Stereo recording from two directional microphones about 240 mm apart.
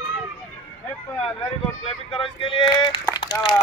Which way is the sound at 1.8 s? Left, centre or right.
Left.